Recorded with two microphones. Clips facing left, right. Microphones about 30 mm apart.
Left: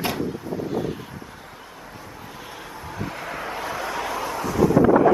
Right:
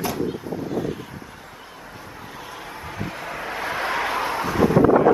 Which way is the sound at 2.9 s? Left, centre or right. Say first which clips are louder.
Left 1 dB; centre.